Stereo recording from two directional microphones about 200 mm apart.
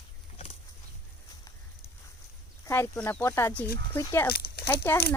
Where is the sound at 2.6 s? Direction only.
10° left (ahead or behind).